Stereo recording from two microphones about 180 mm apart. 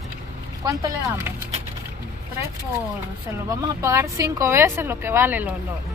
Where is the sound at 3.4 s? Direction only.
15° right (ahead or behind).